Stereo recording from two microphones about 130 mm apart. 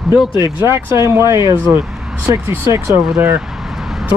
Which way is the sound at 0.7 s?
20° right (ahead or behind).